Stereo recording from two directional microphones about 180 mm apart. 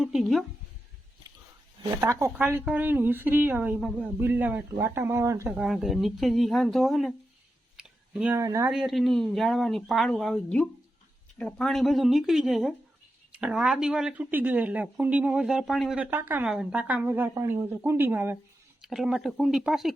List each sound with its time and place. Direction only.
0.0 s speech: centre (ahead or behind)
2.0 s a woman's voice: 15° right (ahead or behind)
7.8 s a sound: 5° right (ahead or behind)
8.4 s a woman's voice: 15° right (ahead or behind)
8.7 s a woman's voice: centre (ahead or behind)